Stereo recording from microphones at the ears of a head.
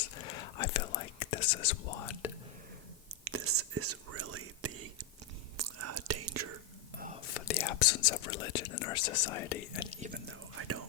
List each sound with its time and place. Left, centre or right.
0.0 s whispering: left
3.2 s whispering: right
7.3 s speech: left
10.5 s whispering: right